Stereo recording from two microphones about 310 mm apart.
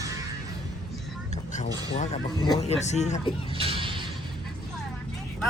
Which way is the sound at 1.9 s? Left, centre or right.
Centre.